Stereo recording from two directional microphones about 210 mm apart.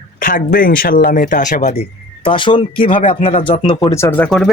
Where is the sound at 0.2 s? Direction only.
40° left (ahead or behind).